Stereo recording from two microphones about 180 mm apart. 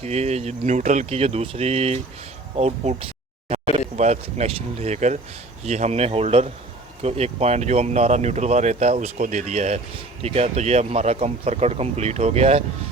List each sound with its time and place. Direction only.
0.0 s speech: 35° right (ahead or behind)